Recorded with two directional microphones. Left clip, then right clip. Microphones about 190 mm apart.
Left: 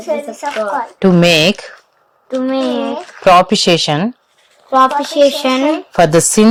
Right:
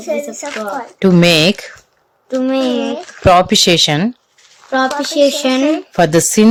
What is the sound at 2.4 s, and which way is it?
Speech, 35° right (ahead or behind).